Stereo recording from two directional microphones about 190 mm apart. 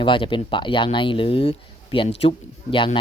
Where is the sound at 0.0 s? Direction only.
25° left (ahead or behind).